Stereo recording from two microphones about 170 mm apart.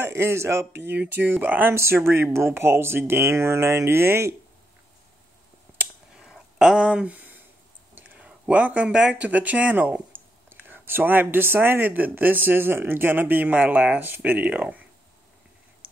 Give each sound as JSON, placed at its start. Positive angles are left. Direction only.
{"t": 0.0, "sound": "speech", "side_deg": -15}
{"t": 5.8, "sound": "a sound", "side_deg": -5}
{"t": 7.9, "sound": "speech", "side_deg": -10}